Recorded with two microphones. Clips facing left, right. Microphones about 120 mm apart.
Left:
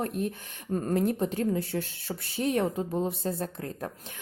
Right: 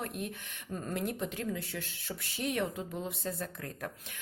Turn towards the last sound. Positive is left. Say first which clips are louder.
# left 5 dB
turn(degrees=30)  # may be behind; listen again after turning